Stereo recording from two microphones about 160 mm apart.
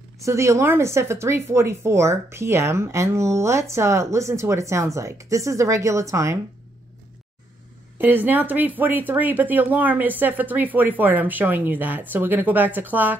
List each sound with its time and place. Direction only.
0.2 s speech: 20° right (ahead or behind)
8.0 s speech: 10° right (ahead or behind)